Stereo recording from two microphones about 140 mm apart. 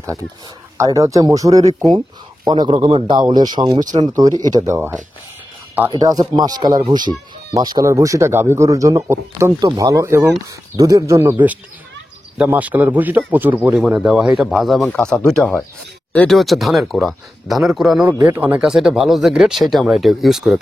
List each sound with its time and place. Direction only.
0.7 s speech: 25° right (ahead or behind)
12.4 s a man's voice: 10° right (ahead or behind); by 16.3 s 10° left (ahead or behind)
16.3 s speech: centre (ahead or behind)